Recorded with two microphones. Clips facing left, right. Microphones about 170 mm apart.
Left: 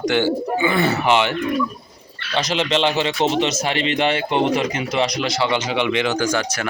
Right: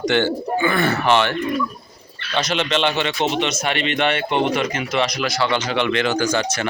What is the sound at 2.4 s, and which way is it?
Speech, 25° left (ahead or behind).